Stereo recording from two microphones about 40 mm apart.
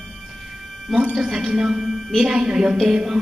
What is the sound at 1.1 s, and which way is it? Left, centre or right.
A woman's voice, centre.